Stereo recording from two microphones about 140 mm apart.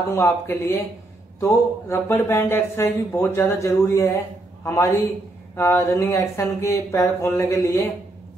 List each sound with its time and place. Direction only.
0.1 s a man's voice: 20° left (ahead or behind)